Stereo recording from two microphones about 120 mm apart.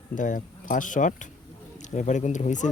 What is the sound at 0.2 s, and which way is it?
Speech, 90° left.